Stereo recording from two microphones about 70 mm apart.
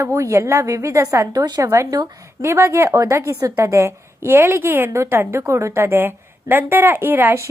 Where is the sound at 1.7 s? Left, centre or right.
Right.